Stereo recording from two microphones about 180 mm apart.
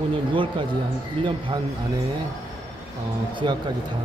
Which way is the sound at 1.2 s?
25° right (ahead or behind).